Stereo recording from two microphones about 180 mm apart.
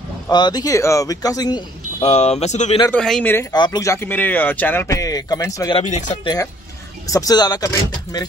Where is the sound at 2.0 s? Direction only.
35° left (ahead or behind).